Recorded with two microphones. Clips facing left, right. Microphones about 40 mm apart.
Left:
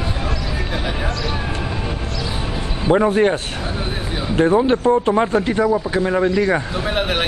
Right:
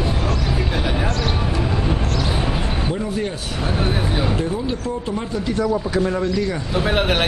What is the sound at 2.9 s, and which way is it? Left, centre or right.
Speech, left.